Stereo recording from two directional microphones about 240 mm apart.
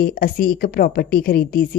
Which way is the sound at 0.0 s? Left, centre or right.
Left.